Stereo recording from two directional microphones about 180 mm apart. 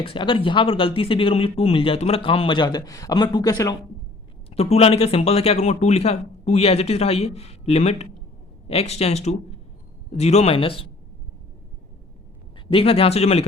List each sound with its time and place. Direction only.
0.0 s speech: 30° left (ahead or behind)
4.4 s speech: 35° left (ahead or behind)
12.7 s speech: 30° left (ahead or behind)